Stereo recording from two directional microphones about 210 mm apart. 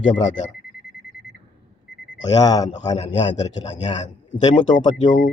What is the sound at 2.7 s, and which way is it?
Speech, 35° left (ahead or behind).